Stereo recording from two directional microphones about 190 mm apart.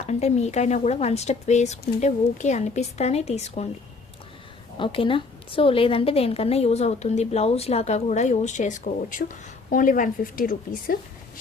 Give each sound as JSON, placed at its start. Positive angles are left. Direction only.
{"t": 0.0, "sound": "a woman's voice", "side_deg": 35}
{"t": 4.8, "sound": "a woman's voice", "side_deg": 25}